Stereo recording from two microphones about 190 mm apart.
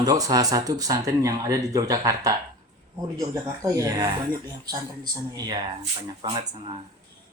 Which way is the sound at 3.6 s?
20° right (ahead or behind).